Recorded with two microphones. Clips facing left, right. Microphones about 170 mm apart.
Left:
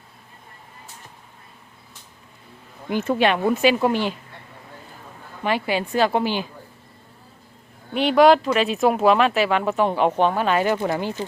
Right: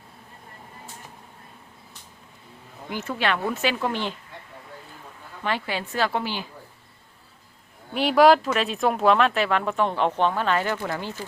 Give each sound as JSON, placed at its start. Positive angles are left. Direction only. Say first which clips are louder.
{"t": 3.2, "sound": "speech", "louder": "left 5 dB", "side_deg": 20}
{"t": 5.4, "sound": "speech", "louder": "left 5 dB", "side_deg": 15}
{"t": 7.9, "sound": "speech", "louder": "left 2 dB", "side_deg": -5}